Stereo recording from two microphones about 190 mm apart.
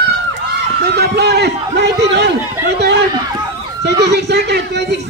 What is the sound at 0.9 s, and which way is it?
Speech, 60° right (ahead or behind).